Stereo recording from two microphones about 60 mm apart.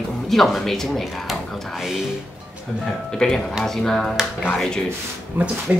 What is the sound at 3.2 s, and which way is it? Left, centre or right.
Speech, centre.